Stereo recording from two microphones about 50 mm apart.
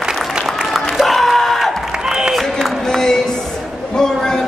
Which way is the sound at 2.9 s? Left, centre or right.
Centre.